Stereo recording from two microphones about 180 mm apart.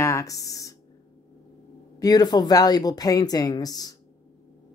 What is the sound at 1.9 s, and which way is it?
Speech, 20° left (ahead or behind).